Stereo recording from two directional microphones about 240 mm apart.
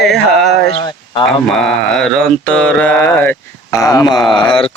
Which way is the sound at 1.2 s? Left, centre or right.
Centre.